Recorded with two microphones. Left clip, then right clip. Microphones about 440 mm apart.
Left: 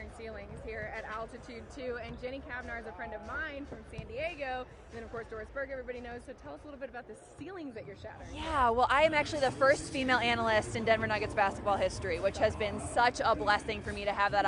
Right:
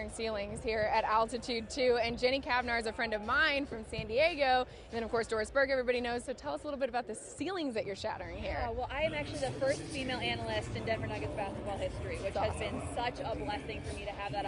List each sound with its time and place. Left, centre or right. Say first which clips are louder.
0.2 s a woman's voice: right 9 dB; right
8.8 s speech: left 8 dB; left